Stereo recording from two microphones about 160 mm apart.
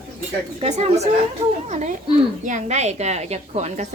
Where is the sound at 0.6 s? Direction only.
45° right (ahead or behind).